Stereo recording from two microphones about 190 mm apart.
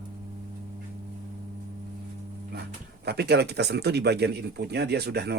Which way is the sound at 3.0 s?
60° right (ahead or behind).